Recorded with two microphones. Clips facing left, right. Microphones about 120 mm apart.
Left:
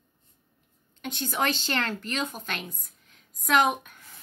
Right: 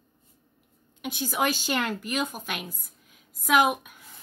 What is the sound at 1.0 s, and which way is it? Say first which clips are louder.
A woman's voice: right 1 dB; 10° right (ahead or behind).